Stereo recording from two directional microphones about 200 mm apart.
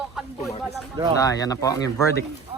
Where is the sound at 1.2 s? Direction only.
15° left (ahead or behind).